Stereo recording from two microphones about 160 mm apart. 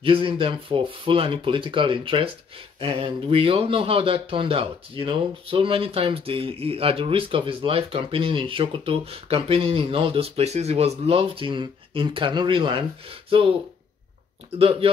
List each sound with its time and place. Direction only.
0.0 s a man's voice: 35° right (ahead or behind)
14.6 s a man's voice: 35° right (ahead or behind)